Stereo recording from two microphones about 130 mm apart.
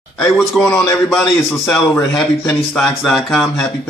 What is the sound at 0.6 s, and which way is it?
Speech, centre (ahead or behind).